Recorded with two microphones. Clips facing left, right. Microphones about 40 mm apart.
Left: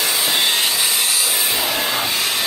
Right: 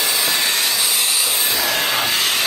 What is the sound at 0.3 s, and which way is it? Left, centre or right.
Wood, left.